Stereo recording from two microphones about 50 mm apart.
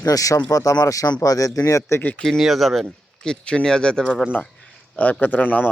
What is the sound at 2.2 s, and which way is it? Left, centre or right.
Speech, centre.